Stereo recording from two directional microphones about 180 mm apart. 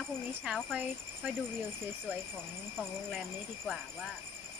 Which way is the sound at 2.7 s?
Centre (ahead or behind).